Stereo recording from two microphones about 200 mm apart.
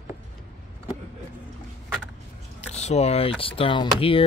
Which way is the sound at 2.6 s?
35° left (ahead or behind).